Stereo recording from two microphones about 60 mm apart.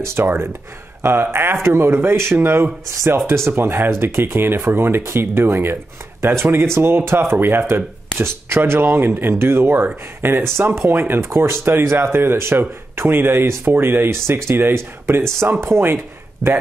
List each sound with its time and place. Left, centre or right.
0.0 s speech: right